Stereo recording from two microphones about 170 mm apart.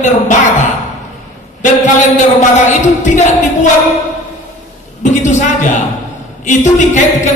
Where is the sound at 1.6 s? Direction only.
45° left (ahead or behind).